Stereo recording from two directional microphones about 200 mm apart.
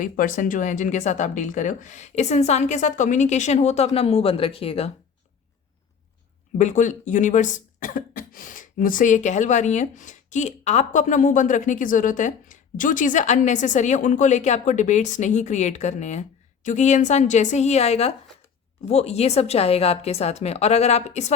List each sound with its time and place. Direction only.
0.0 s speech: 40° left (ahead or behind)
6.6 s speech: 35° left (ahead or behind)